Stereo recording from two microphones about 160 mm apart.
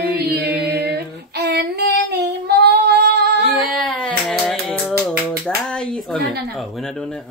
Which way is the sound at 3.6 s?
Centre (ahead or behind).